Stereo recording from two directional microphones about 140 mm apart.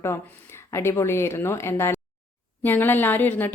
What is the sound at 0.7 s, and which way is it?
A woman's voice, 20° left (ahead or behind).